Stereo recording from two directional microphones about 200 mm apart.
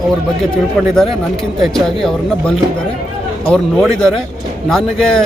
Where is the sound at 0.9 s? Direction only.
Centre (ahead or behind).